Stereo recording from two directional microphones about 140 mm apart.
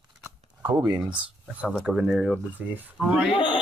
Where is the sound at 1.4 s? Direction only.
10° right (ahead or behind).